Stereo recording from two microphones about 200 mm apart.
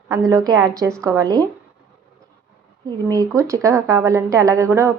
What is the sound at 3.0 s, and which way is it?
A woman's voice, 15° right (ahead or behind).